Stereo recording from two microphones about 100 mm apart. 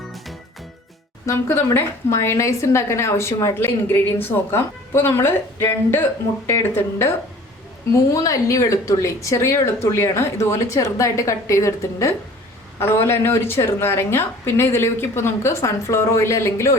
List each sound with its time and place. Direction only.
1.3 s a woman's voice: 25° left (ahead or behind)
8.1 s a woman's voice: 35° left (ahead or behind)